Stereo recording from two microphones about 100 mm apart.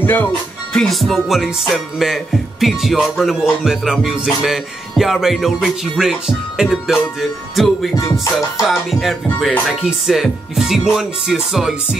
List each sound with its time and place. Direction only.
0.0 s speech: 20° left (ahead or behind)
0.7 s music: centre (ahead or behind)